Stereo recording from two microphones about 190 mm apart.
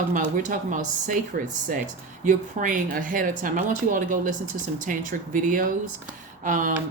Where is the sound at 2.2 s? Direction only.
45° right (ahead or behind).